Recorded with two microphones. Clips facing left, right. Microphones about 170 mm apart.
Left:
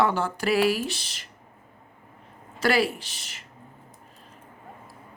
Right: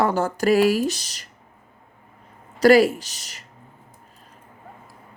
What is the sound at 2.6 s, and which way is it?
Speech, 40° right (ahead or behind).